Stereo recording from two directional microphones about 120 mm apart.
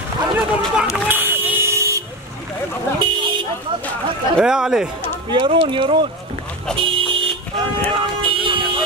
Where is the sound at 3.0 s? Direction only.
40° right (ahead or behind).